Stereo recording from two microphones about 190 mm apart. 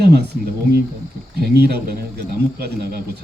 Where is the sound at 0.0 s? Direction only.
60° right (ahead or behind).